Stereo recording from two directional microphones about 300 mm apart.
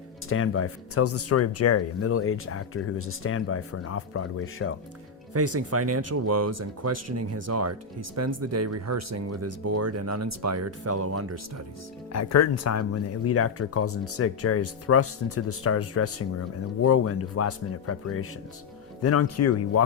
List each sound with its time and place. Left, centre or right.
0.3 s speech: left
5.3 s speech: right
12.1 s speech: left